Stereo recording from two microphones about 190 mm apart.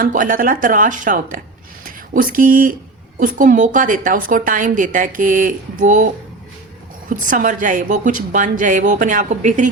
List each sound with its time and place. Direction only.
0.0 s a woman's voice: 45° right (ahead or behind)
7.1 s a woman's voice: 45° right (ahead or behind)